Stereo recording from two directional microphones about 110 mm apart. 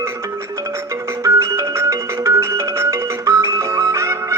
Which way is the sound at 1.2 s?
25° right (ahead or behind).